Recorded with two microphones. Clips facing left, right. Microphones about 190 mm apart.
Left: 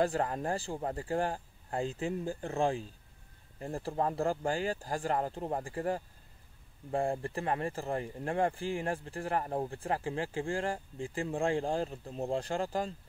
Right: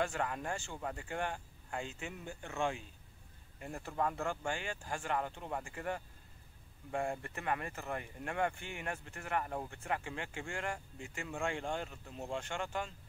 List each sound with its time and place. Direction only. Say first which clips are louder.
0.0 s speech: left 6 dB; 35° left (ahead or behind)